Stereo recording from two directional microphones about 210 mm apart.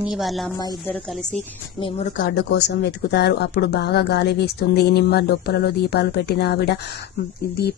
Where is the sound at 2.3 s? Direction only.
55° left (ahead or behind).